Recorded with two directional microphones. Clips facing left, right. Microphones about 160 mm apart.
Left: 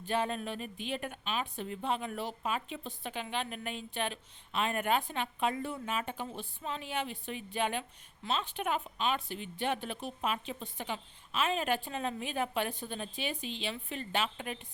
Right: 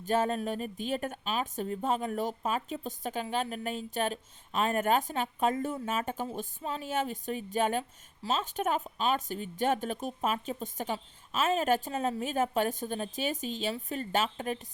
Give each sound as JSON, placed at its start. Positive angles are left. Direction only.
{"t": 0.0, "sound": "a woman's voice", "side_deg": -40}